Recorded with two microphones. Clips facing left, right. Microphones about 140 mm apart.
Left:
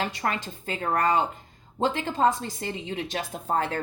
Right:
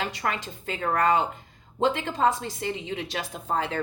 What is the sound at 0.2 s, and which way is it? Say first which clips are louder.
A woman's voice: left 1 dB; 40° left (ahead or behind).